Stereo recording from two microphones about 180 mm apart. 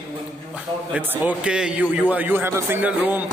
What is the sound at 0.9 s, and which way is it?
A man's voice, 10° right (ahead or behind).